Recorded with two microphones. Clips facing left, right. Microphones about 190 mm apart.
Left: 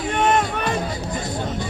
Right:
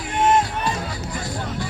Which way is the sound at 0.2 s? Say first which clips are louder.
Right 2 dB; 65° left (ahead or behind).